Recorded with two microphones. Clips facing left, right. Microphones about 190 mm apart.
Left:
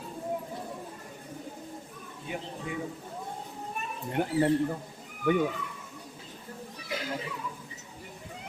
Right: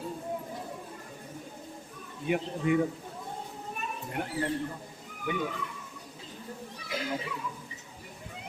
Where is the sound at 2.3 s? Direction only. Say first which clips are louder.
Right 9 dB; 65° right (ahead or behind).